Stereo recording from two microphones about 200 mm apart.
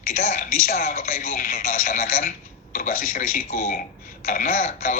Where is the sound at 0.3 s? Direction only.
40° left (ahead or behind).